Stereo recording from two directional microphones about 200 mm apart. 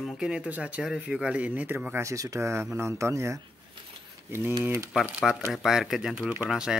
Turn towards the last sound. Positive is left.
turn(degrees=-5)  # may be behind; listen again after turning